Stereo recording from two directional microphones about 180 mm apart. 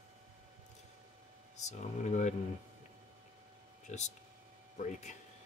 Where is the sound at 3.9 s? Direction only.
40° left (ahead or behind).